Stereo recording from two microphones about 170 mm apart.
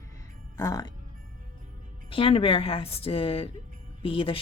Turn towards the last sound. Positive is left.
turn(degrees=30)  # may be behind; listen again after turning